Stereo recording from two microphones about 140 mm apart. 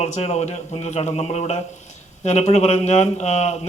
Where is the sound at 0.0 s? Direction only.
50° left (ahead or behind).